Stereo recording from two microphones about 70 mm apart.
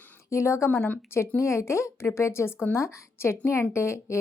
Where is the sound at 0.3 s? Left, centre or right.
Left.